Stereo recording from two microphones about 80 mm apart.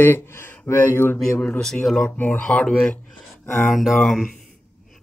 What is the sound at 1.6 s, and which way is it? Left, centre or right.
Speech, centre.